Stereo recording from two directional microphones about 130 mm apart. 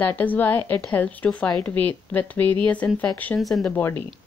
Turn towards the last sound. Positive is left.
turn(degrees=15)  # may be behind; listen again after turning